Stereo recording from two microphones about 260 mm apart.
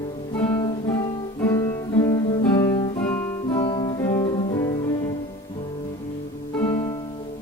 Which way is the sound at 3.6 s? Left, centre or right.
Centre.